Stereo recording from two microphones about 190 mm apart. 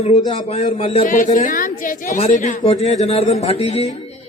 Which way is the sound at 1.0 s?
45° left (ahead or behind).